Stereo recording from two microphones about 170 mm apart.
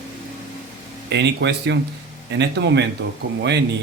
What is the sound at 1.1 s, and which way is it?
Speech, 90° right.